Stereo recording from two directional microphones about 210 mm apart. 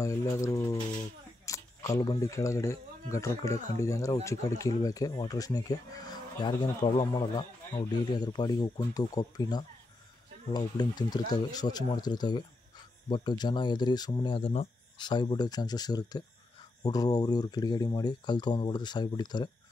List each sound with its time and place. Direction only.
0.0 s speech: 15° left (ahead or behind)